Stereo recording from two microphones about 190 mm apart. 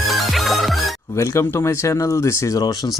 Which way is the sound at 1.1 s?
15° left (ahead or behind).